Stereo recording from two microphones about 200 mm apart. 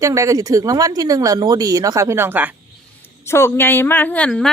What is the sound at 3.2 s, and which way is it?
A woman's voice, 15° left (ahead or behind).